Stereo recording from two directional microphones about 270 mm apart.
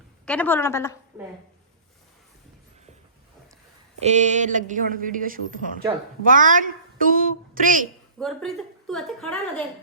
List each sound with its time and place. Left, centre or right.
0.3 s a woman's voice: centre
4.0 s a woman's voice: right
8.2 s a woman's voice: centre